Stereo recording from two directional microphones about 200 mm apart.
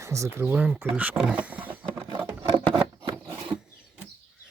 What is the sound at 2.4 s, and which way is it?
Scissors, 25° right (ahead or behind).